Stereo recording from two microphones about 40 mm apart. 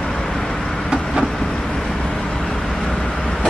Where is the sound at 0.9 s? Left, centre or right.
Right.